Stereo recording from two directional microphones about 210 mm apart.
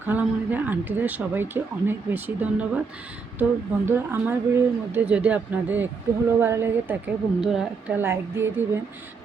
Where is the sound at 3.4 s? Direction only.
10° right (ahead or behind).